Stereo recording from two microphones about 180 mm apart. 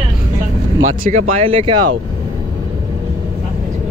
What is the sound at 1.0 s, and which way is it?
Speech, 45° right (ahead or behind).